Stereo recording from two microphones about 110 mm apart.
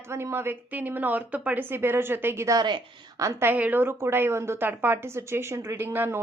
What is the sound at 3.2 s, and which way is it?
A woman's voice, 20° right (ahead or behind).